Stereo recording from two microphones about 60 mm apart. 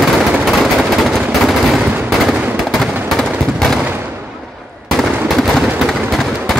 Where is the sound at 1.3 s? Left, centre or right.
Centre.